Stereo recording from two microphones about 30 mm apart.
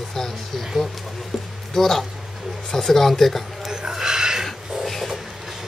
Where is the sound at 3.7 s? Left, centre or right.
Right.